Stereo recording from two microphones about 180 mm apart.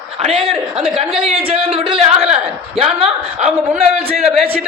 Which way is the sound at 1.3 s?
30° right (ahead or behind).